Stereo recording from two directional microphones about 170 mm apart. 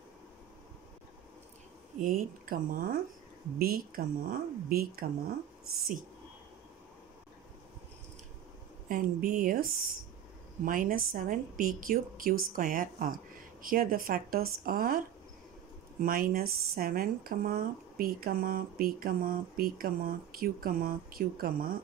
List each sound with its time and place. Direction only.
2.0 s speech: 55° right (ahead or behind)
8.8 s speech: 55° right (ahead or behind)